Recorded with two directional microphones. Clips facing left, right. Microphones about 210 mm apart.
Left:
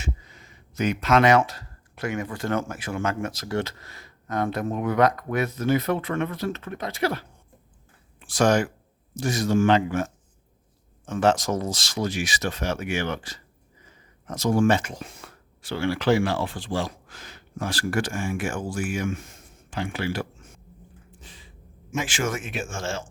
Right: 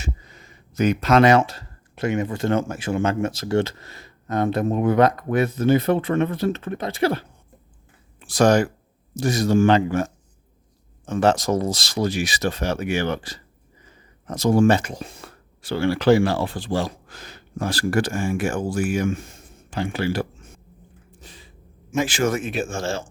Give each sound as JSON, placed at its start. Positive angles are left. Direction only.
{"t": 0.0, "sound": "speech", "side_deg": -40}
{"t": 8.3, "sound": "speech", "side_deg": -40}
{"t": 21.2, "sound": "a sound", "side_deg": -40}
{"t": 21.9, "sound": "speech", "side_deg": -40}